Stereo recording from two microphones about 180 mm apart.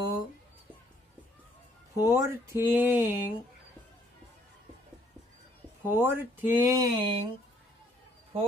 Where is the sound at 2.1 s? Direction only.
15° right (ahead or behind).